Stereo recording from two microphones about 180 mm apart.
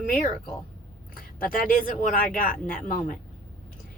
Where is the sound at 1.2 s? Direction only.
50° left (ahead or behind).